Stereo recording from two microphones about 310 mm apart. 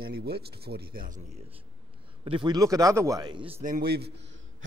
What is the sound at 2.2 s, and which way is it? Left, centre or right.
A man's voice, centre.